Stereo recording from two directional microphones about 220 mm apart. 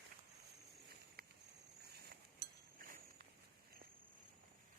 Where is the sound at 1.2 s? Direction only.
45° right (ahead or behind).